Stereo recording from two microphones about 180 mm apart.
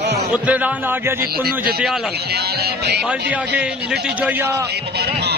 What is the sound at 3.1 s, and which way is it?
A man's voice, 5° right (ahead or behind).